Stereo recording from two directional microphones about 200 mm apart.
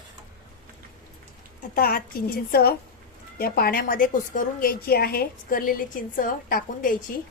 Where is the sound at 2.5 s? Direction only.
50° left (ahead or behind).